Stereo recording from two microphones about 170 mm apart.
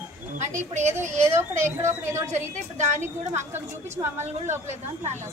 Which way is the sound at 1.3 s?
15° right (ahead or behind).